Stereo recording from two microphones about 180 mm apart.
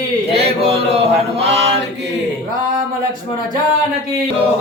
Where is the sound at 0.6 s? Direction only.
35° right (ahead or behind).